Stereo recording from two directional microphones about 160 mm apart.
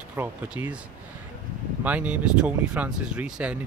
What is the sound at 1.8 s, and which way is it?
Speech, 10° right (ahead or behind).